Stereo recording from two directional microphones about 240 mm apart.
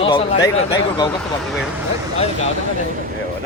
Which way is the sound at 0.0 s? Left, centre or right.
Left.